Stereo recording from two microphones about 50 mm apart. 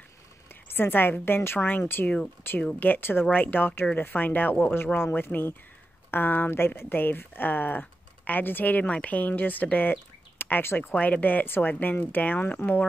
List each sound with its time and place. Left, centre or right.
0.7 s speech: left
3.3 s speech: left
10.4 s speech: left
10.9 s speech: left
12.2 s speech: left